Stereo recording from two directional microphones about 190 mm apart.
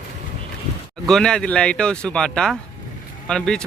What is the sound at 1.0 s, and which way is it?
Speech, 5° left (ahead or behind).